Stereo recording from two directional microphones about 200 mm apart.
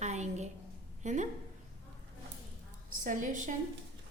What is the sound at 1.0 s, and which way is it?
Speech, 35° right (ahead or behind).